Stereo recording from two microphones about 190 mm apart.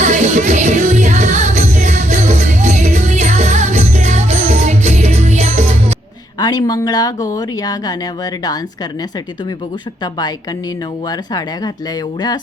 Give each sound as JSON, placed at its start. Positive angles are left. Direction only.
{"t": 0.0, "sound": "music", "side_deg": -40}
{"t": 6.4, "sound": "speech", "side_deg": 20}
{"t": 10.0, "sound": "speech", "side_deg": 20}